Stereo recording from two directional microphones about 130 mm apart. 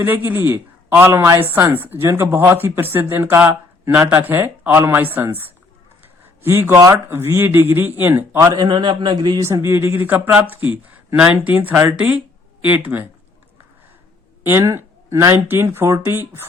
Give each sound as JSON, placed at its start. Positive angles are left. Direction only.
{"t": 0.0, "sound": "speech", "side_deg": -15}
{"t": 6.4, "sound": "speech", "side_deg": -20}
{"t": 8.5, "sound": "a man's voice", "side_deg": -35}
{"t": 9.5, "sound": "speech", "side_deg": -20}
{"t": 14.4, "sound": "speech", "side_deg": -20}